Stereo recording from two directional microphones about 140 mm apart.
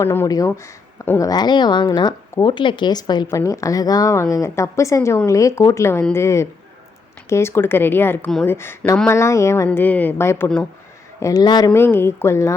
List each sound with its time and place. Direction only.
0.0 s a woman's voice: 20° left (ahead or behind)
1.3 s a woman's voice: 30° left (ahead or behind); by 10.7 s 10° left (ahead or behind)
11.2 s a woman's voice: 25° left (ahead or behind)
11.7 s speech: 15° left (ahead or behind)